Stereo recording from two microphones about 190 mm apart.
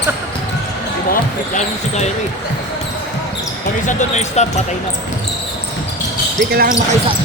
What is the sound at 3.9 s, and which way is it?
Speech, 40° left (ahead or behind).